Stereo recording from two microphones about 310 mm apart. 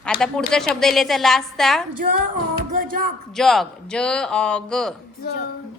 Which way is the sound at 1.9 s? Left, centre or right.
Right.